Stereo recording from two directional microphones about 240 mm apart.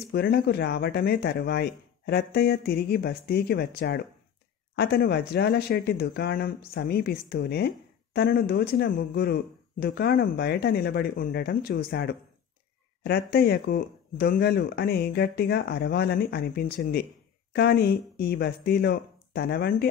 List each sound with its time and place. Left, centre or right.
0.1 s a woman's voice: left